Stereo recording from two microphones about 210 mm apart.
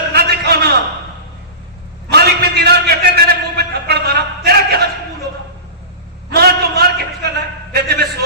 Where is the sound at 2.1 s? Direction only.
50° right (ahead or behind).